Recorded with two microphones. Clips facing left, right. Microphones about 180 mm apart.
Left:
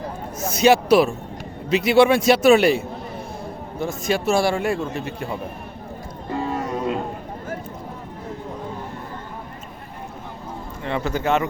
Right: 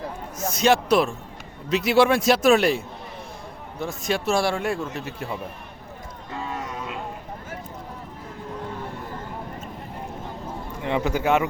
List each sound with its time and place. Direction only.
0.5 s a man's voice: 5° left (ahead or behind)
6.4 s a sound: 35° left (ahead or behind)
10.8 s a man's voice: 15° right (ahead or behind)